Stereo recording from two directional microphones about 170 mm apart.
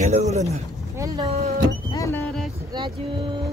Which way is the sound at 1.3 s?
40° right (ahead or behind).